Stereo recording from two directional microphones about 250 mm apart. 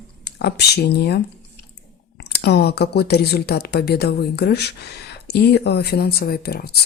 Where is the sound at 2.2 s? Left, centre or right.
Left.